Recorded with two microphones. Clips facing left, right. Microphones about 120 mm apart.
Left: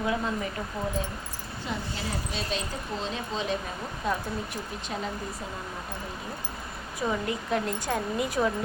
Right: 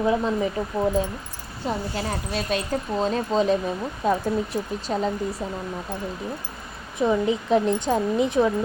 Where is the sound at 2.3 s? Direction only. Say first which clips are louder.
Right 7 dB; 55° right (ahead or behind); by 4.9 s 35° right (ahead or behind).